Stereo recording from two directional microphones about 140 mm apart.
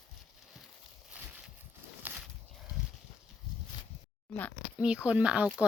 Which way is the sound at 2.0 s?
15° right (ahead or behind).